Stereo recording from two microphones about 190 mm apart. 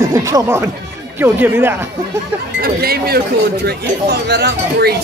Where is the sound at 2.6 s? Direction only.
55° right (ahead or behind).